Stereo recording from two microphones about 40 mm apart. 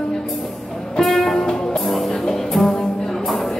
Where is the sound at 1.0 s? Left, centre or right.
Centre.